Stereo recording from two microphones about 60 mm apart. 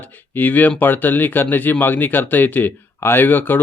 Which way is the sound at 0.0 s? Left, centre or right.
Left.